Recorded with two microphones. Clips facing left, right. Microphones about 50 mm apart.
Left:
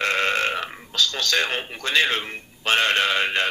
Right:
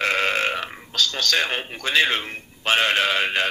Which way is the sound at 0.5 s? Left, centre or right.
Centre.